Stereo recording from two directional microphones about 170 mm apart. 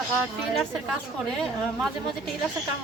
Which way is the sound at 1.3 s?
5° left (ahead or behind).